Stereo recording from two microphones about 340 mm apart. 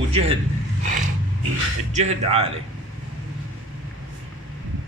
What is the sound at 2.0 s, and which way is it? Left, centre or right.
Speech, centre.